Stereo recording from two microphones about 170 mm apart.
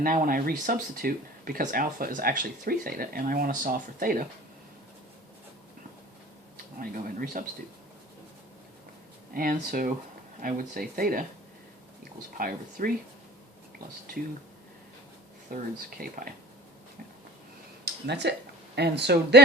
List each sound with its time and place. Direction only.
0.0 s speech: 55° right (ahead or behind)
6.7 s speech: 55° right (ahead or behind)
9.3 s speech: 55° right (ahead or behind)
12.4 s speech: 60° right (ahead or behind)
15.5 s speech: 60° right (ahead or behind)
17.8 s speech: 75° right (ahead or behind)